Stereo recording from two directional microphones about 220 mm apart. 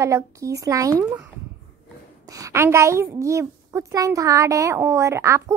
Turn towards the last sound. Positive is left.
turn(degrees=-10)  # may be behind; listen again after turning